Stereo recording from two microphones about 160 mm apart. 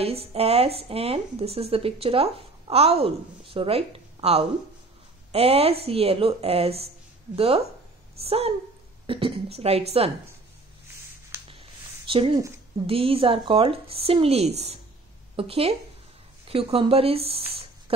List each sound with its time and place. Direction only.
0.0 s a woman's voice: 35° right (ahead or behind)
12.1 s speech: 35° right (ahead or behind)
17.5 s a sound: 35° right (ahead or behind)